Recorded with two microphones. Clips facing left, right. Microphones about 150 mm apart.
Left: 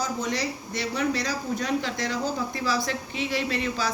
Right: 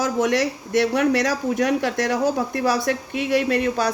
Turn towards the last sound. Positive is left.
turn(degrees=-60)  # may be behind; listen again after turning